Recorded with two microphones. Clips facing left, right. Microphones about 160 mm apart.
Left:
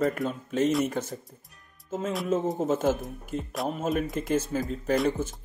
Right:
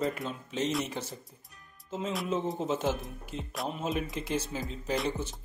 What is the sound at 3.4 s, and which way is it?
Speech, centre (ahead or behind).